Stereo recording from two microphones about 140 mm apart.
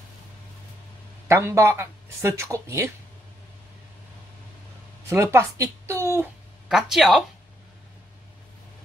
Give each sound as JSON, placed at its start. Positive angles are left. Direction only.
{"t": 1.3, "sound": "speech", "side_deg": -20}
{"t": 5.1, "sound": "speech", "side_deg": -20}
{"t": 6.7, "sound": "speech", "side_deg": 0}